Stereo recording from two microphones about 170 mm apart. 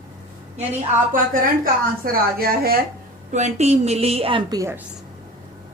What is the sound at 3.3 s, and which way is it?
A woman's voice, 40° right (ahead or behind).